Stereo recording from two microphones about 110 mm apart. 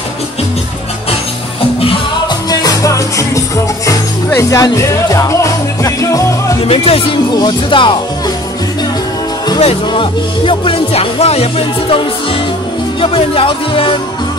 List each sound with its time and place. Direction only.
2.5 s music: 35° left (ahead or behind)
6.6 s speech: 65° left (ahead or behind)
7.3 s speech: 45° left (ahead or behind)
9.6 s speech: 60° left (ahead or behind)
13.0 s speech: 55° left (ahead or behind)